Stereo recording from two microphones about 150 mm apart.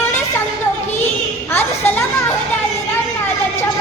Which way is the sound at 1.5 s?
15° left (ahead or behind).